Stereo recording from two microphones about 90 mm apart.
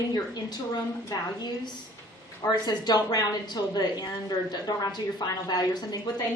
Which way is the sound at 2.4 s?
45° left (ahead or behind).